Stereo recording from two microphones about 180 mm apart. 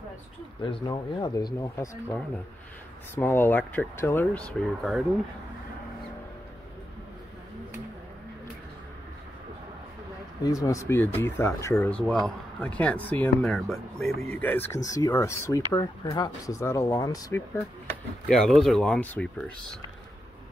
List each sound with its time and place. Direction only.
0.6 s speech: 25° left (ahead or behind)
3.2 s speech: 10° left (ahead or behind)
10.4 s speech: 20° left (ahead or behind)
18.3 s speech: centre (ahead or behind)